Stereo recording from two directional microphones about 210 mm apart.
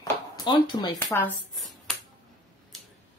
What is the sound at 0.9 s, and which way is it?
Speech, 10° left (ahead or behind).